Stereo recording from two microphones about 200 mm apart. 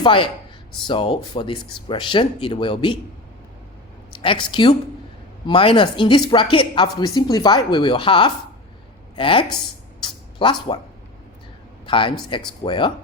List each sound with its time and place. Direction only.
0.0 s speech: 25° left (ahead or behind)
4.1 s speech: 25° left (ahead or behind)
5.5 s speech: 25° left (ahead or behind)
10.0 s a sound: 25° left (ahead or behind)
11.9 s speech: 25° left (ahead or behind)